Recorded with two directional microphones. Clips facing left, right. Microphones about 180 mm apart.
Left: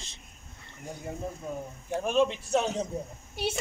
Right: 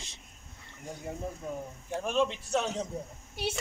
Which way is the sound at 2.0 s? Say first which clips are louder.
Left 4 dB; 10° left (ahead or behind).